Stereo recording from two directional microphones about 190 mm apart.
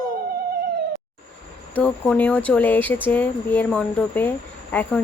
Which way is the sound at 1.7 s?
5° left (ahead or behind).